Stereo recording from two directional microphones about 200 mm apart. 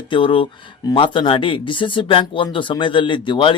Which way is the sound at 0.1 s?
25° left (ahead or behind).